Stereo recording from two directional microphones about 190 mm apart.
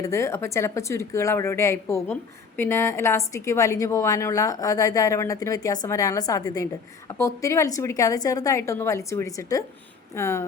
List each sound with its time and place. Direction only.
0.0 s a woman's voice: 15° left (ahead or behind)